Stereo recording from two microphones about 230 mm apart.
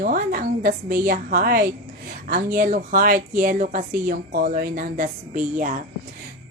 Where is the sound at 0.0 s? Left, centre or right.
Right.